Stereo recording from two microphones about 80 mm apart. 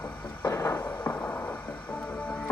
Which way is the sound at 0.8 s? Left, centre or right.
Left.